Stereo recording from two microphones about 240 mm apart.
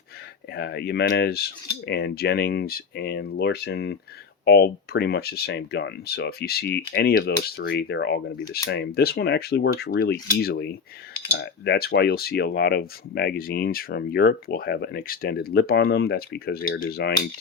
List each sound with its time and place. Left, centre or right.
0.5 s speech: left